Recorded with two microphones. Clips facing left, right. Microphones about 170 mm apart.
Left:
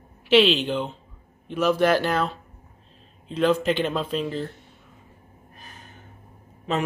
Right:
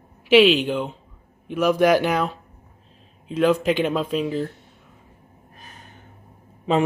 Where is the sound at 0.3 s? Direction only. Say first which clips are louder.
Right 3 dB; 5° right (ahead or behind).